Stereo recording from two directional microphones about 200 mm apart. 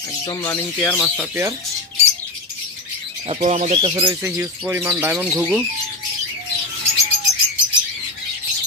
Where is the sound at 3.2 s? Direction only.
35° right (ahead or behind).